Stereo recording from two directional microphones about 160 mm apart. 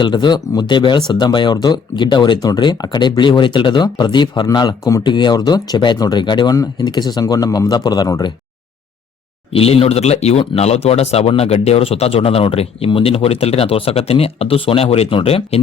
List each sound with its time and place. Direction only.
0.0 s speech: 30° left (ahead or behind)
9.5 s speech: 40° left (ahead or behind)